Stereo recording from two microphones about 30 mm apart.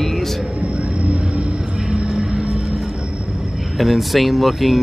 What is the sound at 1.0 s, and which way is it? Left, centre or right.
Vehicle, right.